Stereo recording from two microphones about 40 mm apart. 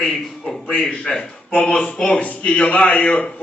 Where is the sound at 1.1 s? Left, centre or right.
Centre.